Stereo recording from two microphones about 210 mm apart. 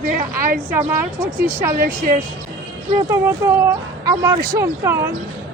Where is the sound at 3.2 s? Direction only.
10° right (ahead or behind).